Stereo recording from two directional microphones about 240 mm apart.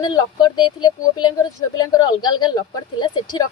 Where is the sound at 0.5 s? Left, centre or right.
Centre.